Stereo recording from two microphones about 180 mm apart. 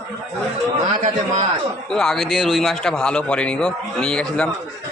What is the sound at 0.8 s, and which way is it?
Speech, 45° right (ahead or behind).